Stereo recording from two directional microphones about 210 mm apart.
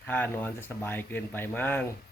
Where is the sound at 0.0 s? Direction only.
10° left (ahead or behind).